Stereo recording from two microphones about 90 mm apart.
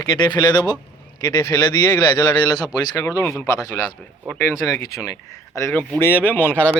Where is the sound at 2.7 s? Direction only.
40° left (ahead or behind).